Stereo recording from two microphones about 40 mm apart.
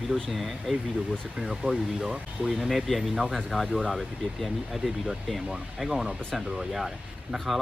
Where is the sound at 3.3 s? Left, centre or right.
Centre.